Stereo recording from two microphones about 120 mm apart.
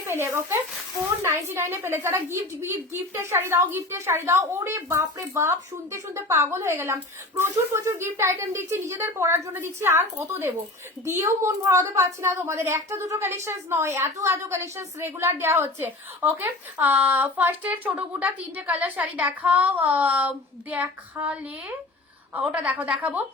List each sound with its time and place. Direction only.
0.1 s a woman's voice: 20° right (ahead or behind)
22.4 s a woman's voice: 10° right (ahead or behind)